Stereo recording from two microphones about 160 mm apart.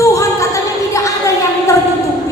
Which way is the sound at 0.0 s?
20° left (ahead or behind).